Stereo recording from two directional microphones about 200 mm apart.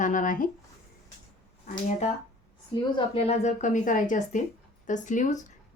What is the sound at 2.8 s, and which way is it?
Speech, 25° left (ahead or behind).